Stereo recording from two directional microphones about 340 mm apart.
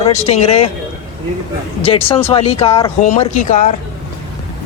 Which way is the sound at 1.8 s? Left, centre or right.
Centre.